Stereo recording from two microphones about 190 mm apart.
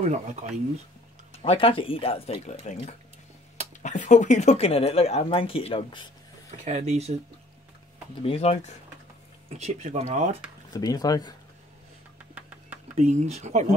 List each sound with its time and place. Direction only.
0.1 s speech: 35° right (ahead or behind)
1.4 s speech: 30° left (ahead or behind)
6.6 s speech: 35° right (ahead or behind)
8.2 s speech: 30° left (ahead or behind)
9.5 s speech: 40° right (ahead or behind)
10.7 s speech: 20° left (ahead or behind)
13.0 s speech: 35° right (ahead or behind)